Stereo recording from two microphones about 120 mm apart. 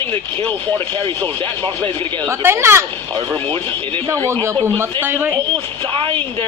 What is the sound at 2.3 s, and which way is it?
Speech, 20° right (ahead or behind).